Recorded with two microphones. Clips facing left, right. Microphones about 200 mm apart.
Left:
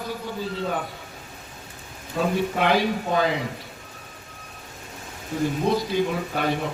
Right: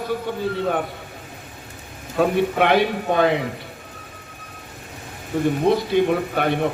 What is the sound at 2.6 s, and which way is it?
Speech, 60° right (ahead or behind).